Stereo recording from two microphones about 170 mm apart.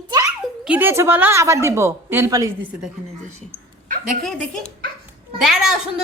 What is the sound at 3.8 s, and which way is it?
Speech, 55° right (ahead or behind).